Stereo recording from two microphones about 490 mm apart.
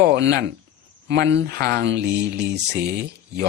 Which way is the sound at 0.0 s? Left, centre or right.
Right.